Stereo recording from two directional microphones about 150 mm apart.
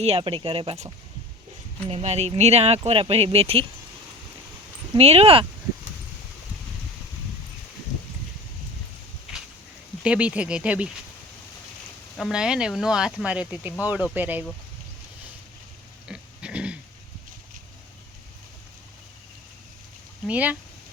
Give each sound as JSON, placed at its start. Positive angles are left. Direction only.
{"t": 0.0, "sound": "speech", "side_deg": -40}
{"t": 1.9, "sound": "speech", "side_deg": -45}
{"t": 4.9, "sound": "speech", "side_deg": -40}
{"t": 10.0, "sound": "speech", "side_deg": -10}
{"t": 12.1, "sound": "speech", "side_deg": 0}
{"t": 16.0, "sound": "pig", "side_deg": -5}
{"t": 20.2, "sound": "speech", "side_deg": -10}